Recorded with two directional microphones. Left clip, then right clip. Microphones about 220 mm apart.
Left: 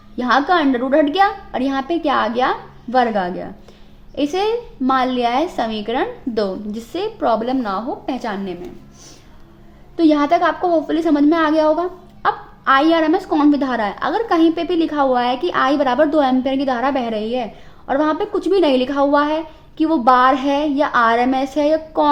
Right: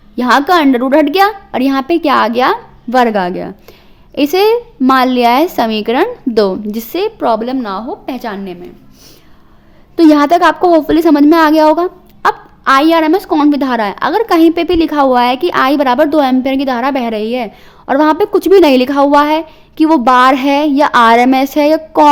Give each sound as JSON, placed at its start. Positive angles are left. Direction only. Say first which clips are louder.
{"t": 0.2, "sound": "a woman's voice", "louder": "right 6 dB", "side_deg": -40}
{"t": 9.9, "sound": "a woman's voice", "louder": "right 7 dB", "side_deg": -45}